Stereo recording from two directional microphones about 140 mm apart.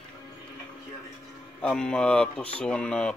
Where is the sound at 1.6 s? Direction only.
5° left (ahead or behind).